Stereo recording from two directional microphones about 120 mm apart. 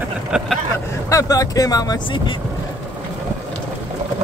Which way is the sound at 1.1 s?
30° left (ahead or behind).